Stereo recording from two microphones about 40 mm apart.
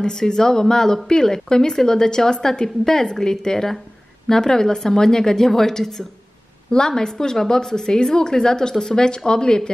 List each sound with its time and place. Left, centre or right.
0.0 s speech: centre